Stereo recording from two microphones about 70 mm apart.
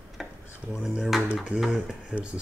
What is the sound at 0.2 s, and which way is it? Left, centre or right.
Dishes, centre.